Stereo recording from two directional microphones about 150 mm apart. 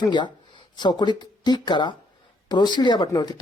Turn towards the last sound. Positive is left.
turn(degrees=25)  # may be behind; listen again after turning